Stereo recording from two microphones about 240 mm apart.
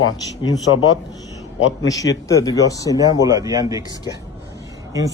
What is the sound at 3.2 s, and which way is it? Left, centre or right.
Speech, centre.